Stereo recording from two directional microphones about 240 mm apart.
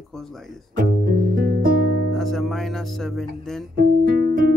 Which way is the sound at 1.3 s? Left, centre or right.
Right.